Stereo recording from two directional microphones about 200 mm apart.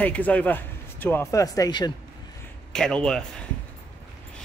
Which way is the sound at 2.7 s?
5° left (ahead or behind).